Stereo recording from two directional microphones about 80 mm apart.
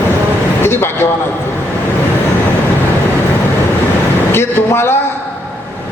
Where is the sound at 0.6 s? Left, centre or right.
Left.